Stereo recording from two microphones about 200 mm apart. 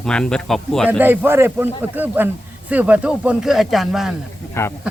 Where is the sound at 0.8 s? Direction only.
10° right (ahead or behind).